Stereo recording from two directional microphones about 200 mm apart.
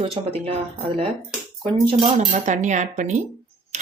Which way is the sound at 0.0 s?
30° right (ahead or behind).